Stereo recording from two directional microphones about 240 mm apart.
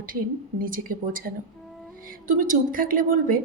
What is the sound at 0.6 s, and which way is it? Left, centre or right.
A woman's voice, right.